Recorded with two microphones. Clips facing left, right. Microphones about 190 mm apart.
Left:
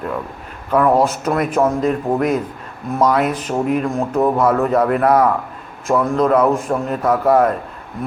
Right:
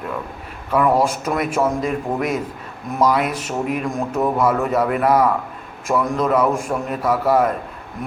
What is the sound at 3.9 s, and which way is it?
Speech, 35° left (ahead or behind).